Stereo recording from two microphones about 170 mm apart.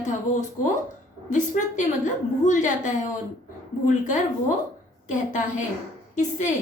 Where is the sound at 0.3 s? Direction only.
45° left (ahead or behind).